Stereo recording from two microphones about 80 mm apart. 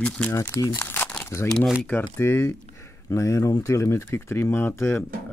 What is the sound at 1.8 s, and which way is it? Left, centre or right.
Speech, centre.